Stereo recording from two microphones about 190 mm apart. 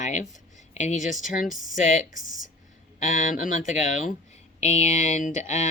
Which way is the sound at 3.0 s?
40° left (ahead or behind).